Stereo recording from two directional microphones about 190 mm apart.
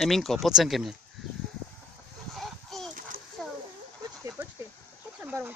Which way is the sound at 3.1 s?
50° right (ahead or behind).